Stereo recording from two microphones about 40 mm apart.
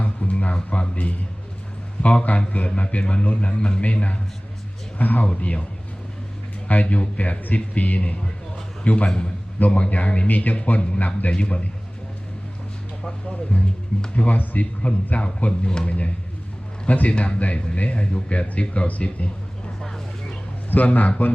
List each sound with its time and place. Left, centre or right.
0.0 s a sound: left
0.5 s a man's voice: left
4.9 s speech: left
5.2 s a man's voice: left
6.7 s a man's voice: left
9.6 s a man's voice: left
10.2 s a man's voice: left
13.5 s a man's voice: left
16.8 s a man's voice: left
20.7 s a man's voice: left